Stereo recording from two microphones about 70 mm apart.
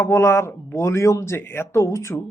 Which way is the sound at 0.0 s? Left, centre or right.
Left.